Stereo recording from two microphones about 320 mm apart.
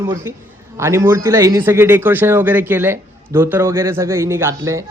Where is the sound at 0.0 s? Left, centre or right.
Centre.